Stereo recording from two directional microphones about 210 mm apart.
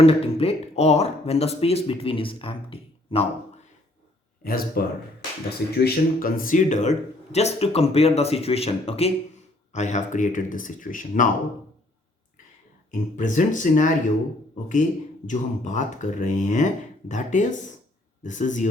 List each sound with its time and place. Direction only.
0.0 s speech: 25° left (ahead or behind)
4.4 s speech: 45° left (ahead or behind)
12.9 s speech: 35° left (ahead or behind)
15.3 s speech: 35° left (ahead or behind)